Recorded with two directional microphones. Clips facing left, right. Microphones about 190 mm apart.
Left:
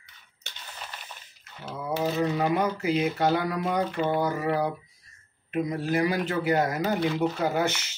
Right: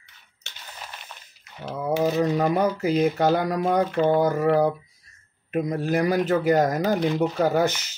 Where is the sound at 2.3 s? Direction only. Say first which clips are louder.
Right 4 dB; 40° right (ahead or behind).